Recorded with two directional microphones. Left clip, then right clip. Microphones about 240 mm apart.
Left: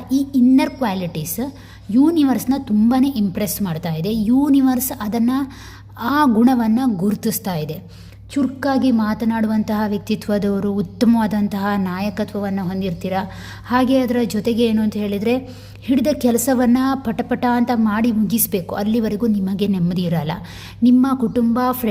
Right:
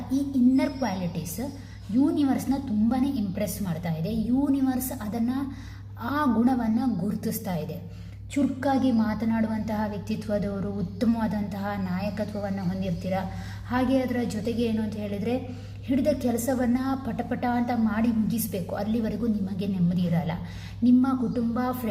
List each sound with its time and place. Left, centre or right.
0.1 s a woman's voice: left